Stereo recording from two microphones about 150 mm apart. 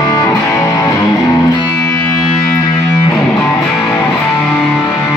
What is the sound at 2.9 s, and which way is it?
Music, centre (ahead or behind).